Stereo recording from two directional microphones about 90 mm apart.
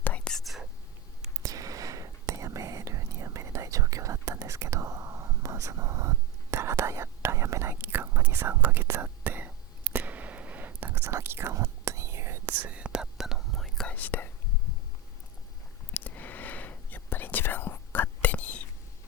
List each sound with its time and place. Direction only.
0.0 s whispering: 15° left (ahead or behind)
0.3 s whispering: centre (ahead or behind)
1.4 s whispering: 40° right (ahead or behind)
12.5 s whispering: 15° right (ahead or behind); by 13.9 s 5° left (ahead or behind)
13.9 s whispering: 20° left (ahead or behind)
16.0 s whispering: 20° left (ahead or behind)